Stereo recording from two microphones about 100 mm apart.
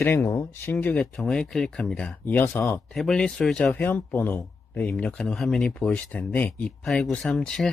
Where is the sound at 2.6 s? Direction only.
20° left (ahead or behind).